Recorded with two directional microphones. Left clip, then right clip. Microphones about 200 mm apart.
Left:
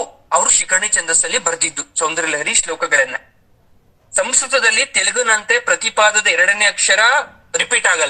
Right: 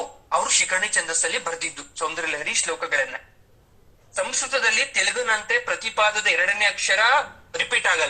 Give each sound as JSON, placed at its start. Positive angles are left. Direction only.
{"t": 0.0, "sound": "a man's voice", "side_deg": 30}